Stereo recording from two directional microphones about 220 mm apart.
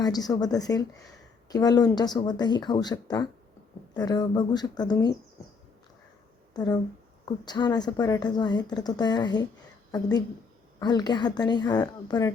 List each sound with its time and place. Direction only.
0.0 s a woman's voice: 15° left (ahead or behind)
6.5 s a woman's voice: 20° left (ahead or behind)